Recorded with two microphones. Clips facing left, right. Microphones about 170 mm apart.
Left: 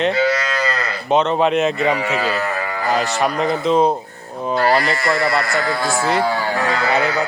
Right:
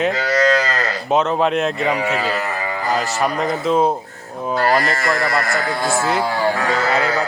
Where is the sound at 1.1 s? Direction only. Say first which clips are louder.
Left 2 dB; 5° right (ahead or behind).